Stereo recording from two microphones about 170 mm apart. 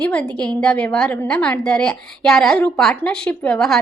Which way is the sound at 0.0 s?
10° left (ahead or behind).